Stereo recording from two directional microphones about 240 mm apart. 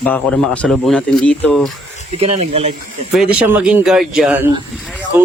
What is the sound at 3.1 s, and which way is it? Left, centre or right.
Speech, centre.